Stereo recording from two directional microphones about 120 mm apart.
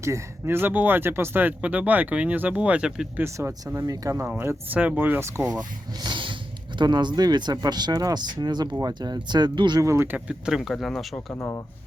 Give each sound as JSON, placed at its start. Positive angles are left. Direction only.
{"t": 0.0, "sound": "speech", "side_deg": -20}
{"t": 3.2, "sound": "speech", "side_deg": -20}
{"t": 4.3, "sound": "speech", "side_deg": -15}
{"t": 9.8, "sound": "speech", "side_deg": -20}
{"t": 11.3, "sound": "speech", "side_deg": 20}